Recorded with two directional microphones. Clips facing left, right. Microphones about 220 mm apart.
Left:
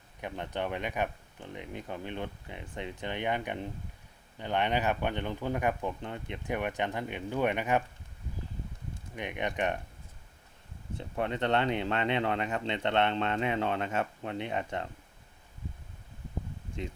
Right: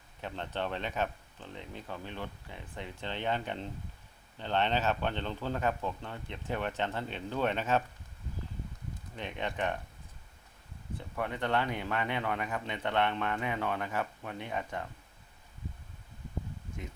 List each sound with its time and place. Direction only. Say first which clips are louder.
0.2 s speech: left 2 dB; 15° left (ahead or behind)
9.1 s speech: left 3 dB; 15° left (ahead or behind)
10.9 s speech: left 4 dB; 25° left (ahead or behind)